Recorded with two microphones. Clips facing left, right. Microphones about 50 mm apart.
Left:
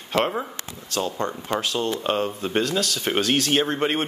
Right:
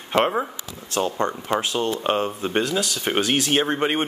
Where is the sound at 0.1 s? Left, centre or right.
Right.